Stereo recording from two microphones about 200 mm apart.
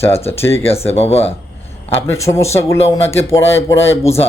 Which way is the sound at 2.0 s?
15° left (ahead or behind).